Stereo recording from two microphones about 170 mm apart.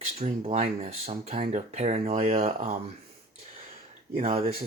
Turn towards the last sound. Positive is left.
turn(degrees=-35)  # may be behind; listen again after turning